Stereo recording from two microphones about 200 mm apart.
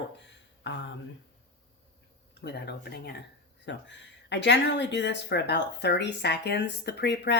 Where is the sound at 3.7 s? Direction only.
65° left (ahead or behind).